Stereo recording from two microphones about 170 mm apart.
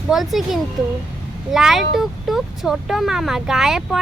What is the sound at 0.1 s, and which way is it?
Speech, centre (ahead or behind).